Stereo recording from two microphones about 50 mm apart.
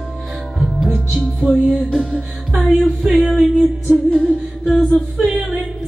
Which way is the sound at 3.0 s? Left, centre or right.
Centre.